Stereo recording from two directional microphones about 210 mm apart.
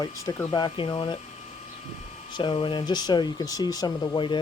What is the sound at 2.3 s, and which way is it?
Speech, 25° left (ahead or behind).